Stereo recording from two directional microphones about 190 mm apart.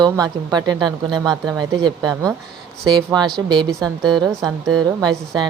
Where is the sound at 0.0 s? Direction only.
20° right (ahead or behind).